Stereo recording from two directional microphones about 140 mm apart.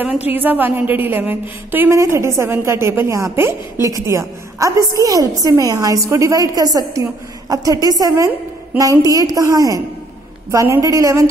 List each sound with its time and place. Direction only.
0.3 s a woman's voice: 15° right (ahead or behind)